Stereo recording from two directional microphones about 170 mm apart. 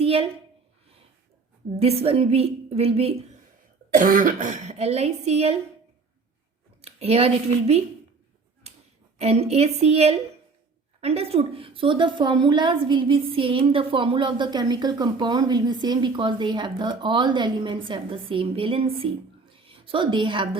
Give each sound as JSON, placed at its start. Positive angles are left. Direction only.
{"t": 0.0, "sound": "a sound", "side_deg": -35}
{"t": 1.7, "sound": "a woman's voice", "side_deg": -35}
{"t": 3.9, "sound": "speech", "side_deg": -50}
{"t": 6.8, "sound": "a woman's voice", "side_deg": -35}
{"t": 8.7, "sound": "a sound", "side_deg": -40}
{"t": 9.1, "sound": "a woman's voice", "side_deg": -35}